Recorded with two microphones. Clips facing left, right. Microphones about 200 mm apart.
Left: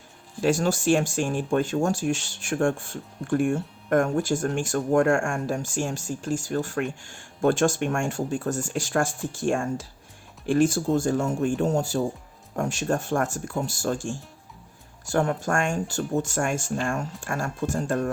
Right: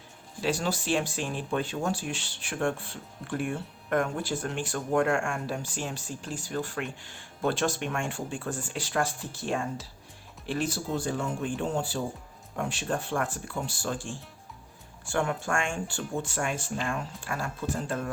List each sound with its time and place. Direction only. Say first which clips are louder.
0.4 s speech: left 7 dB; 45° left (ahead or behind)